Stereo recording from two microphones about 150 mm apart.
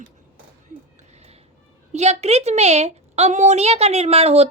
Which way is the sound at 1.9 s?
45° right (ahead or behind).